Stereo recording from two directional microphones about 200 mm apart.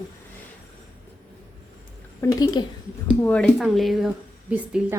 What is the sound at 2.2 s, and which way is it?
Speech, 20° left (ahead or behind).